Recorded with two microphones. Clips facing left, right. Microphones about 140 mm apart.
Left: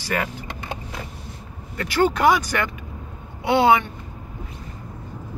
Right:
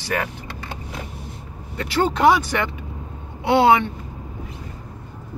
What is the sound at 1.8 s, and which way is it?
Speech, 25° right (ahead or behind).